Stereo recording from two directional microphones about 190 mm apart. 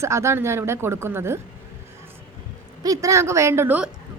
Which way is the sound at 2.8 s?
20° right (ahead or behind).